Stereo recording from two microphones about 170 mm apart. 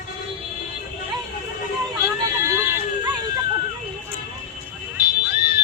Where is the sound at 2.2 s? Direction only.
15° right (ahead or behind).